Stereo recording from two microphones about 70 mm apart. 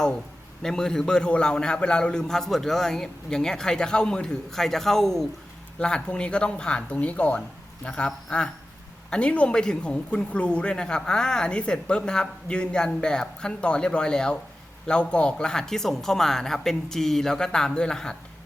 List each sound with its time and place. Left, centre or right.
0.6 s speech: centre